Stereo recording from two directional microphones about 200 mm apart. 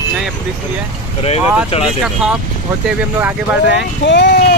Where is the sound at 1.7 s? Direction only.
30° left (ahead or behind).